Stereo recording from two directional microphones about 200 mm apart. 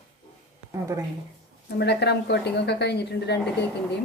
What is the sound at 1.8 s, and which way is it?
A woman's voice, 55° left (ahead or behind).